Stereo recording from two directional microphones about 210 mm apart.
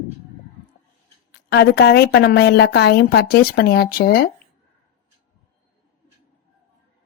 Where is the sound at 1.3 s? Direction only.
50° left (ahead or behind).